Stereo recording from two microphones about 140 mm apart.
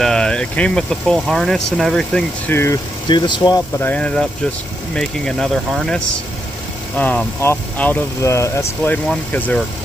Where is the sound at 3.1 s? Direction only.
35° left (ahead or behind).